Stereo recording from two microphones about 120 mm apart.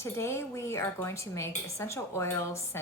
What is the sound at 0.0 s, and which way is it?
A woman's voice, 20° left (ahead or behind).